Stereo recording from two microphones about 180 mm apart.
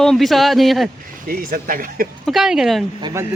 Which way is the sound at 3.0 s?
15° right (ahead or behind).